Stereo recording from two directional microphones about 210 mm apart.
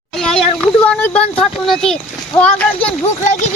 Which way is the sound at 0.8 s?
5° left (ahead or behind).